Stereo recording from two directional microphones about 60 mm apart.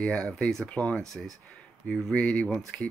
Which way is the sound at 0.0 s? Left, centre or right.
Centre.